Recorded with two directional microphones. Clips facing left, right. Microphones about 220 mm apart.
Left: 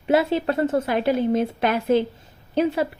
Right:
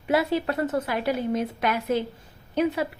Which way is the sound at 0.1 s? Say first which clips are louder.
Left 4 dB; 25° left (ahead or behind).